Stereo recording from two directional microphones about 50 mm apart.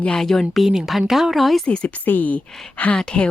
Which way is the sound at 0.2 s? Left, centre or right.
Centre.